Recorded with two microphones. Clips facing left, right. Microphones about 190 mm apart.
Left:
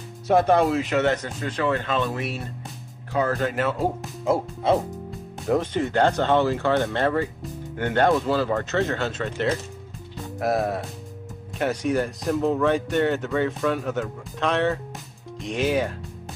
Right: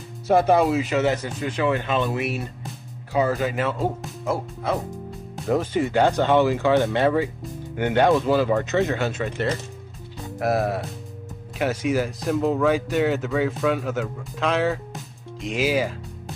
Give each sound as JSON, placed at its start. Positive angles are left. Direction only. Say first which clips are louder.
{"t": 0.3, "sound": "speech", "louder": "right 1 dB", "side_deg": -5}
{"t": 4.2, "sound": "speech", "louder": "left 4 dB", "side_deg": 25}
{"t": 5.3, "sound": "speech", "louder": "right 1 dB", "side_deg": 0}
{"t": 10.2, "sound": "speech", "louder": "right 1 dB", "side_deg": 0}